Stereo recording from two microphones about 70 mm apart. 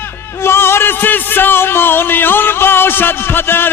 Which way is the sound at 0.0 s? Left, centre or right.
Left.